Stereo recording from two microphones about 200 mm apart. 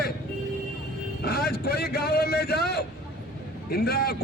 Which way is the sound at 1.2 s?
50° left (ahead or behind).